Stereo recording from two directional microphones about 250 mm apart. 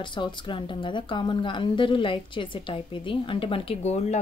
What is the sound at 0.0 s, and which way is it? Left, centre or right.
Speech, centre.